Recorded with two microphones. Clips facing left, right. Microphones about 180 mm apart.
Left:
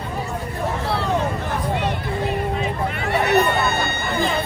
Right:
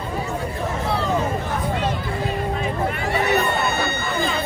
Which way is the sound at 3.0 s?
65° left (ahead or behind).